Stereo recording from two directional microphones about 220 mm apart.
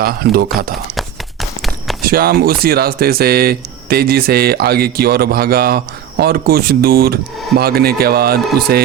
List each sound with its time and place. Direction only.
0.0 s speech: 45° right (ahead or behind)
0.9 s a sound: centre (ahead or behind)
2.0 s speech: 40° right (ahead or behind)